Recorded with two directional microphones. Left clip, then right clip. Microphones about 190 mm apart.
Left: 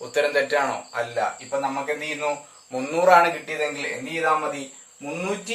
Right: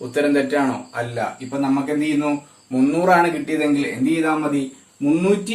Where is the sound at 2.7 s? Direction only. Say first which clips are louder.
Right 1 dB; 20° left (ahead or behind).